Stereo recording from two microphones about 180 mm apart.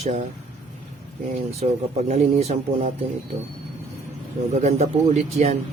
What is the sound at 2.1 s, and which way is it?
Speech, 35° right (ahead or behind).